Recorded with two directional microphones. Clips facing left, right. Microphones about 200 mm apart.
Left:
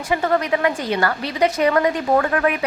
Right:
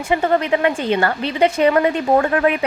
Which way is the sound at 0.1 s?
25° right (ahead or behind).